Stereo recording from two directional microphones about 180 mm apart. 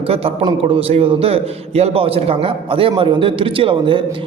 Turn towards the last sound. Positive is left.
turn(degrees=-30)  # may be behind; listen again after turning